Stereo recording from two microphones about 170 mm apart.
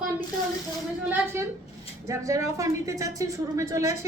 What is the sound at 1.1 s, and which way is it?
A woman's voice, 15° right (ahead or behind).